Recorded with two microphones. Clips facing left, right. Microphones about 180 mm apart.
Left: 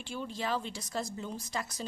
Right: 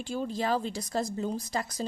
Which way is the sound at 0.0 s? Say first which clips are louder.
Right 6 dB; 40° right (ahead or behind).